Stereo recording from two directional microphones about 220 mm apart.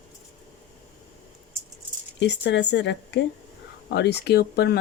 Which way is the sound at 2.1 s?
50° left (ahead or behind).